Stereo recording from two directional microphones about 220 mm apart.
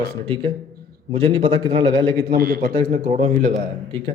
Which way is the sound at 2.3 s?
45° right (ahead or behind).